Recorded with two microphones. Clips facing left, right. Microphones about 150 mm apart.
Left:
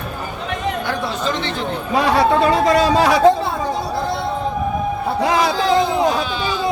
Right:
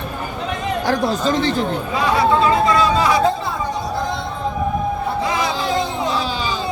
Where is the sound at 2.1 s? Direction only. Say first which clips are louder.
Right 1 dB; 75° left (ahead or behind).